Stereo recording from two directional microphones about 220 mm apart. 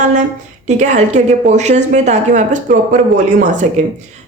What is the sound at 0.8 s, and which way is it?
Speech, 35° right (ahead or behind).